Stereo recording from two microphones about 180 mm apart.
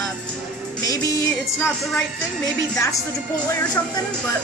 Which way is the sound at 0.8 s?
20° left (ahead or behind).